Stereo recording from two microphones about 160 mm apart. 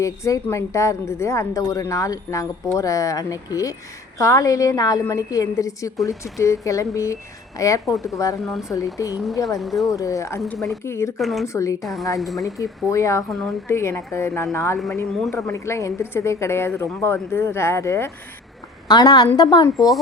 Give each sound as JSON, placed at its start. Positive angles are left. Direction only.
{"t": 0.0, "sound": "a woman's voice", "side_deg": 20}
{"t": 8.4, "sound": "speech", "side_deg": 0}
{"t": 9.0, "sound": "a woman's voice", "side_deg": 20}
{"t": 9.6, "sound": "speech", "side_deg": 0}
{"t": 9.9, "sound": "a woman's voice", "side_deg": 20}
{"t": 10.5, "sound": "speech", "side_deg": 0}
{"t": 10.8, "sound": "a woman's voice", "side_deg": 15}
{"t": 11.2, "sound": "speech", "side_deg": 0}
{"t": 11.4, "sound": "a woman's voice", "side_deg": 20}
{"t": 11.8, "sound": "speech", "side_deg": 0}
{"t": 12.5, "sound": "a woman's voice", "side_deg": 20}
{"t": 13.2, "sound": "speech", "side_deg": 0}
{"t": 13.7, "sound": "a woman's voice", "side_deg": 15}